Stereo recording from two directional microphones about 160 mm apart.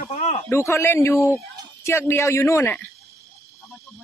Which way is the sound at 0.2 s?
40° left (ahead or behind).